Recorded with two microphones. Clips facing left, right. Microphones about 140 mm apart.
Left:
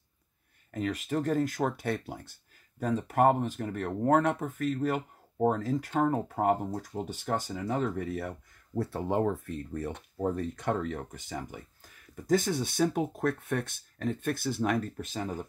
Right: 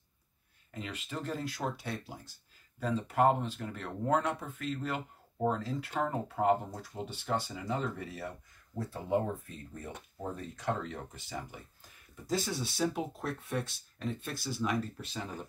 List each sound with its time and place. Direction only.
0.7 s speech: 50° left (ahead or behind)
2.8 s speech: 50° left (ahead or behind)